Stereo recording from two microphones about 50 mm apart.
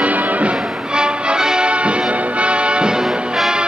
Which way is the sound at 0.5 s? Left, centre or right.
Centre.